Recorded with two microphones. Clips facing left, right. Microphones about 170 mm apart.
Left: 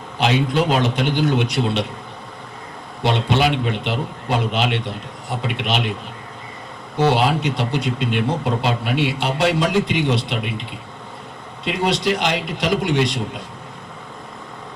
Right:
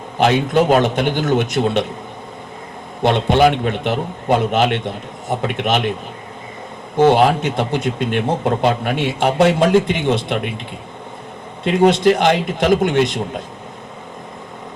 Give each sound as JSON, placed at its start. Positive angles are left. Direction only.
{"t": 0.2, "sound": "a man's voice", "side_deg": -50}
{"t": 3.0, "sound": "a man's voice", "side_deg": -50}
{"t": 6.9, "sound": "a man's voice", "side_deg": -50}
{"t": 11.6, "sound": "a man's voice", "side_deg": -50}